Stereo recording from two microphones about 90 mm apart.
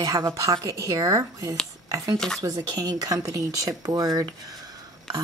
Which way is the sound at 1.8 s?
40° right (ahead or behind).